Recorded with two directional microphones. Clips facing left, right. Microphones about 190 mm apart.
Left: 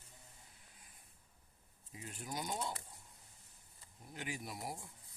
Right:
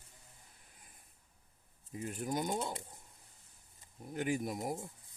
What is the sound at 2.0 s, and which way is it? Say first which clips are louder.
Speech: right 8 dB; 50° right (ahead or behind).